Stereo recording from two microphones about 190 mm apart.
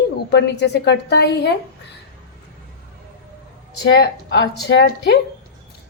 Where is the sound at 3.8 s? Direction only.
65° left (ahead or behind).